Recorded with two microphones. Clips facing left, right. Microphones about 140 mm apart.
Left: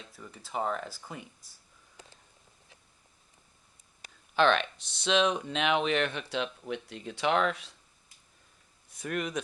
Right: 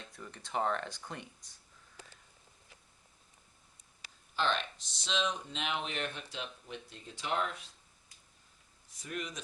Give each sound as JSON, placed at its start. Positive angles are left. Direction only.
{"t": 0.0, "sound": "speech", "side_deg": 5}
{"t": 4.0, "sound": "speech", "side_deg": 65}
{"t": 8.9, "sound": "speech", "side_deg": 65}